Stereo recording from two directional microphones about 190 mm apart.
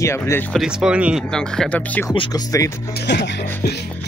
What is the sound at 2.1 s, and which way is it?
Speech, 25° left (ahead or behind).